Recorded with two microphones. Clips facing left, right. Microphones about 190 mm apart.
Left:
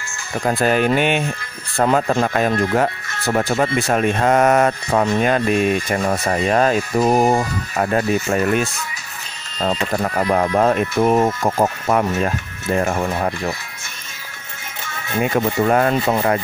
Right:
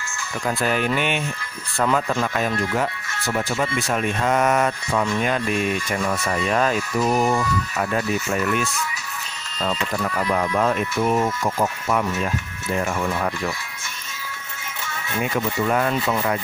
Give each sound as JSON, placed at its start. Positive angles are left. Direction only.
{"t": 0.5, "sound": "speech", "side_deg": 50}
{"t": 1.8, "sound": "speech", "side_deg": 40}
{"t": 3.4, "sound": "speech", "side_deg": 60}
{"t": 5.2, "sound": "speech", "side_deg": 60}
{"t": 5.9, "sound": "speech", "side_deg": 40}
{"t": 15.2, "sound": "speech", "side_deg": 45}